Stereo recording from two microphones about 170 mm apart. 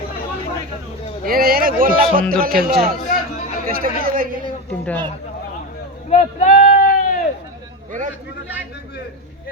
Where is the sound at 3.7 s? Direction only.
60° right (ahead or behind).